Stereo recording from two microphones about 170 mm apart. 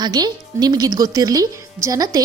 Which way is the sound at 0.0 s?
25° right (ahead or behind).